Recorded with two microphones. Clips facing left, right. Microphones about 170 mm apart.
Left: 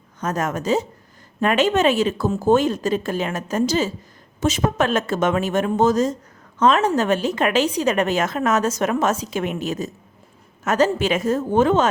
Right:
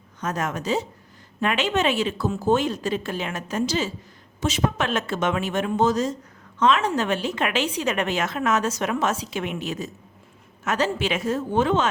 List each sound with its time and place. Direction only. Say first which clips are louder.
0.2 s a woman's voice: left 4 dB; 45° left (ahead or behind)